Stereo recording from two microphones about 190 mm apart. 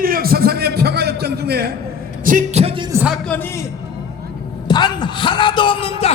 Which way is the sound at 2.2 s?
40° right (ahead or behind).